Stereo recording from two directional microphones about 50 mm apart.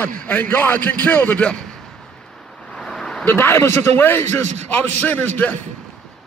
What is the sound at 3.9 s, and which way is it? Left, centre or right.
A man's voice, left.